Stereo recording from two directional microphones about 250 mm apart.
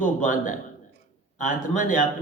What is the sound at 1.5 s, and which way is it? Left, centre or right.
Speech, left.